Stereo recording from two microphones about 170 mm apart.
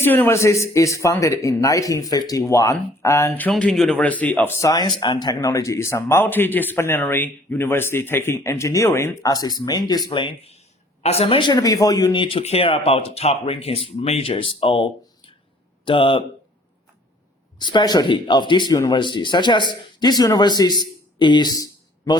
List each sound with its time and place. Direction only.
0.0 s speech: 15° left (ahead or behind); by 16.2 s 30° left (ahead or behind)
17.6 s speech: 25° left (ahead or behind)
21.2 s a sound: 25° left (ahead or behind)